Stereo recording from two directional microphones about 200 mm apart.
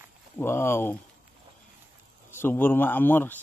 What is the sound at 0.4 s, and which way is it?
Speech, 10° left (ahead or behind).